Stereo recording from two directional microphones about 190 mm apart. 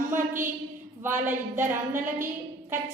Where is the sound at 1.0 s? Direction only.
10° right (ahead or behind).